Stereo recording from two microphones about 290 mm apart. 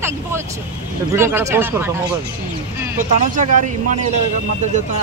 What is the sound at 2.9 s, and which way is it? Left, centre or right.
Speech, right.